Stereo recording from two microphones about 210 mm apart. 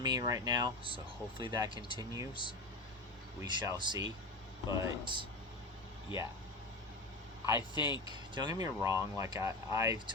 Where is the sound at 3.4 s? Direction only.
20° right (ahead or behind).